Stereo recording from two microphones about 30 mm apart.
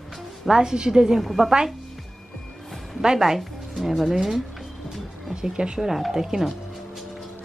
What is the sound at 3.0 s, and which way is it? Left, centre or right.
Speech, centre.